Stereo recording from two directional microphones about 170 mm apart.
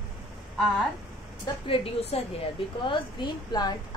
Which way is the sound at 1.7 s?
35° left (ahead or behind).